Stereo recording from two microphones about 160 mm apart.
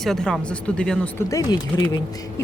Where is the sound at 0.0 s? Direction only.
Centre (ahead or behind).